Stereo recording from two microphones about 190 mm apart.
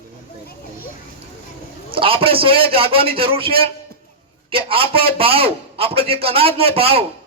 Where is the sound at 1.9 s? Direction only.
30° right (ahead or behind).